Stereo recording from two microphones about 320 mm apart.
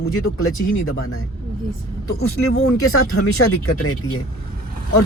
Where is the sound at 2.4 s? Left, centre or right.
Left.